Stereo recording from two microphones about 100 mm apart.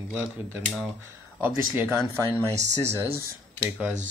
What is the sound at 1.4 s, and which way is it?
Speech, 20° right (ahead or behind).